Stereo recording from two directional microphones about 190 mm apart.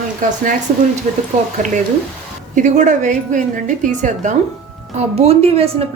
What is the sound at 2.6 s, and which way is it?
A woman's voice, 40° right (ahead or behind).